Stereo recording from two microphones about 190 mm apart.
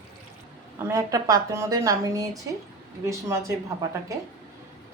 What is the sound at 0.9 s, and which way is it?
A woman's voice, 15° right (ahead or behind).